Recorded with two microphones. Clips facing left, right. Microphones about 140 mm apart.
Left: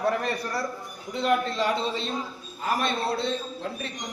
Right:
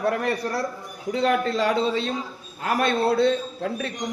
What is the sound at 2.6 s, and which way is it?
A man's voice, 65° right (ahead or behind).